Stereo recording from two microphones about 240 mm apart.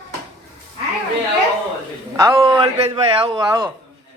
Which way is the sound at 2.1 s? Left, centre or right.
Centre.